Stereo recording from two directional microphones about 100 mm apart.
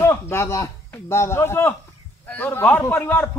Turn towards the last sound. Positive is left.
turn(degrees=20)  # may be behind; listen again after turning